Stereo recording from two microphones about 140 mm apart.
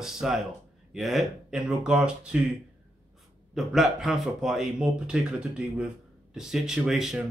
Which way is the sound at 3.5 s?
Centre (ahead or behind).